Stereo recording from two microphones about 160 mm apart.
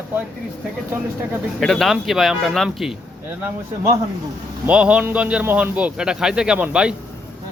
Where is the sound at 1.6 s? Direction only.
Centre (ahead or behind).